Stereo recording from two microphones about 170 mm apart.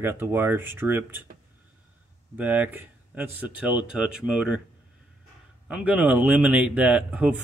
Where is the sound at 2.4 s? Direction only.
10° right (ahead or behind).